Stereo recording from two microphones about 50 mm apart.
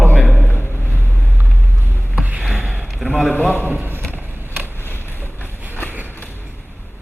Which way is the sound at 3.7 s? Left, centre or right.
Right.